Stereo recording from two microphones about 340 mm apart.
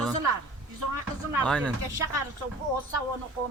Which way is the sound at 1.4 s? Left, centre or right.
Centre.